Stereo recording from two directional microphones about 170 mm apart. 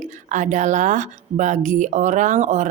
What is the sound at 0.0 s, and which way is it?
Speech, 45° right (ahead or behind).